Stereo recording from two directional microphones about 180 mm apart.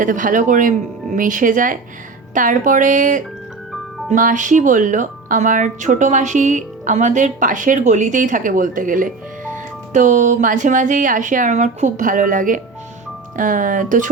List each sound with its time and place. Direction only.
0.0 s speech: 45° right (ahead or behind)